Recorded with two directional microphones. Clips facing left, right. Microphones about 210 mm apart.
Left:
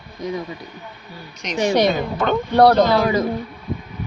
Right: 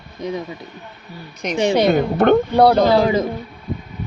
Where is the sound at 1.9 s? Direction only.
60° right (ahead or behind).